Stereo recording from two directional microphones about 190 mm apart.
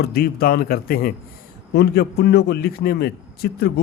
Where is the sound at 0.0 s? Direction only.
55° left (ahead or behind).